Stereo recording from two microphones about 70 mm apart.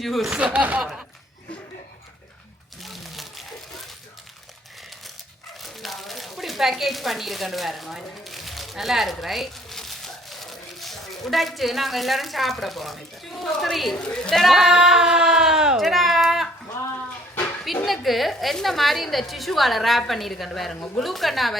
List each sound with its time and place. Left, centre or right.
0.0 s a woman's voice: centre
0.3 s speech: centre
0.8 s speech: centre
2.8 s a sound: centre
5.5 s a sound: centre
14.0 s speech: centre
14.4 s speech: centre
15.8 s a sound: centre
17.8 s a woman's voice: centre